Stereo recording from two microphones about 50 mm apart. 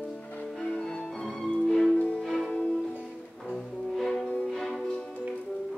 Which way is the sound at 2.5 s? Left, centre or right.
Left.